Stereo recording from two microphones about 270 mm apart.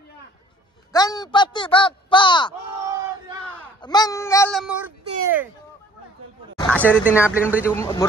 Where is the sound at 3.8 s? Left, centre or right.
Centre.